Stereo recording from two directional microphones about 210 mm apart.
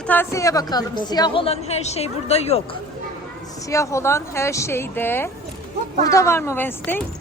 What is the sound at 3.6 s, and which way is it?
A woman's voice, 15° left (ahead or behind).